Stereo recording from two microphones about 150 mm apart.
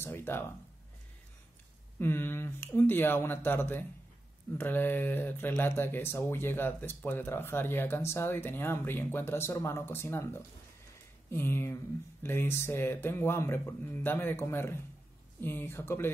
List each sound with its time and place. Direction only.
0.0 s speech: 15° left (ahead or behind)
2.0 s speech: 15° left (ahead or behind)